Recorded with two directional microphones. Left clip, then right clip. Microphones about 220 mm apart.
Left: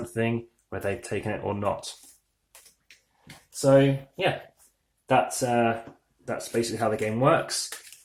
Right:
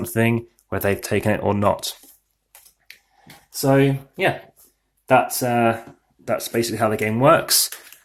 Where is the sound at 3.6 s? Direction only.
35° right (ahead or behind).